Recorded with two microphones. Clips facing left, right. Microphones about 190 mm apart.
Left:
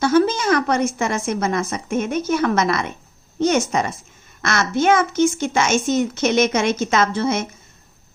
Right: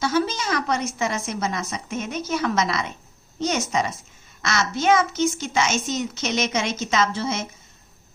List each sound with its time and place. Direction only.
0.0 s a woman's voice: 55° left (ahead or behind)